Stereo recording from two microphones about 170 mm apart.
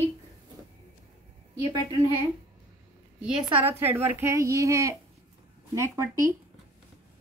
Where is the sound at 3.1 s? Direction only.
10° right (ahead or behind).